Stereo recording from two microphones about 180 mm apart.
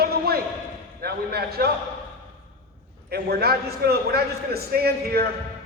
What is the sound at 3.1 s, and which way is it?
A man's voice, 60° right (ahead or behind).